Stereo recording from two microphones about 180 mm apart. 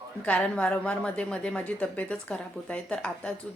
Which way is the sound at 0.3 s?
5° left (ahead or behind).